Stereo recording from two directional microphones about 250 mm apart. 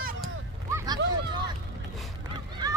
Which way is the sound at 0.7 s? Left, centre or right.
Centre.